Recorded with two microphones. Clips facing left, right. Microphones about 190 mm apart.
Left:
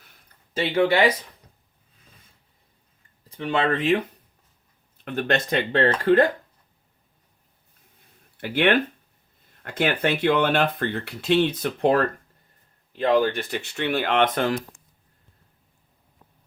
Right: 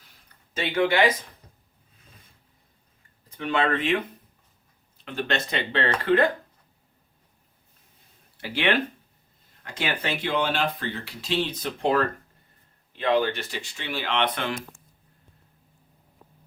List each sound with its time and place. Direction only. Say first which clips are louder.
0.5 s speech: left 3 dB; 35° left (ahead or behind)
3.4 s speech: left 2 dB; 35° left (ahead or behind)
5.0 s speech: left 4 dB; 50° left (ahead or behind)
8.4 s speech: left 4 dB; 55° left (ahead or behind)
13.0 s speech: left 3 dB; 45° left (ahead or behind)